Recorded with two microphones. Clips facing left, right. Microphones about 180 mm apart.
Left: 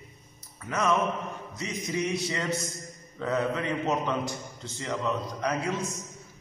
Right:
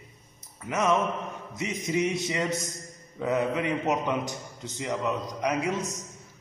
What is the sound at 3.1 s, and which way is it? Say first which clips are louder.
A man's voice: right 2 dB; 15° right (ahead or behind).